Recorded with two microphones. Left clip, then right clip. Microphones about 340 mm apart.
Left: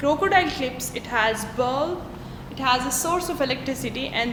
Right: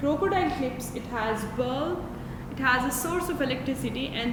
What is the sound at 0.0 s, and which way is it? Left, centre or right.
Speech, left.